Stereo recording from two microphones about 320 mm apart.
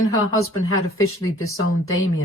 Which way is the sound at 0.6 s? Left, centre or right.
Left.